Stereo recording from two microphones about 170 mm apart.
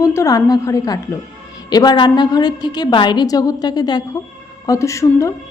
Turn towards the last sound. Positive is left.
turn(degrees=15)  # may be behind; listen again after turning